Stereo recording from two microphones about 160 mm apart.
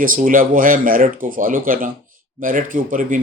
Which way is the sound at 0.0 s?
60° right (ahead or behind).